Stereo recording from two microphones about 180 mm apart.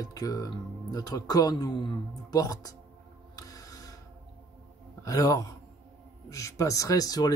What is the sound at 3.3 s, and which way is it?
Music, 20° left (ahead or behind).